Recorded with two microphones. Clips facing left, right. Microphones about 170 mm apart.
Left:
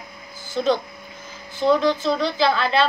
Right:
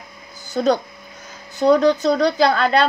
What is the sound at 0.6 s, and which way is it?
A woman's voice, 45° right (ahead or behind).